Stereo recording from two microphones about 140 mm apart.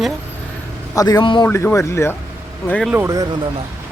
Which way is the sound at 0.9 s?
25° left (ahead or behind).